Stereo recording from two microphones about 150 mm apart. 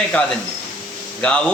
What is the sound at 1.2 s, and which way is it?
Speech, 5° left (ahead or behind).